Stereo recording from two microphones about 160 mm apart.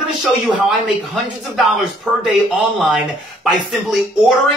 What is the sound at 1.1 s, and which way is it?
Speech, centre (ahead or behind).